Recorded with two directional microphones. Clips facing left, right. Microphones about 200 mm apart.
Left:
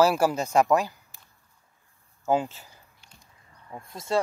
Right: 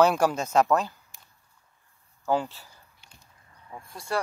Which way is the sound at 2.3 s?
20° left (ahead or behind).